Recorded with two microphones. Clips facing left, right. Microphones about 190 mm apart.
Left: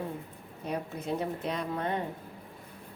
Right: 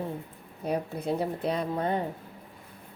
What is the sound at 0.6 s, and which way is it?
A woman's voice, 35° right (ahead or behind).